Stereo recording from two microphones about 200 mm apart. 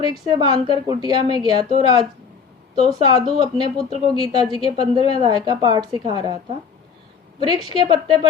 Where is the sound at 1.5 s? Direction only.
30° left (ahead or behind).